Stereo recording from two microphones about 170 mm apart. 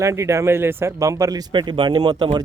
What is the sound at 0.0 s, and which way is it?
Speech, 15° right (ahead or behind).